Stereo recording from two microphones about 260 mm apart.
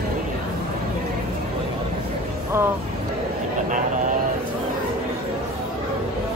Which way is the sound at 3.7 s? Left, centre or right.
Right.